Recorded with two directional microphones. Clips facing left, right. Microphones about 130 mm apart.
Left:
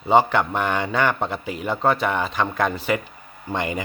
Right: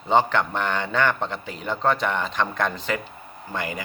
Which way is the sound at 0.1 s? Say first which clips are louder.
Left 3 dB; 10° left (ahead or behind).